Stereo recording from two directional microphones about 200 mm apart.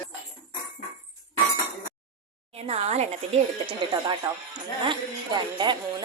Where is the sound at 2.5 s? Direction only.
30° right (ahead or behind).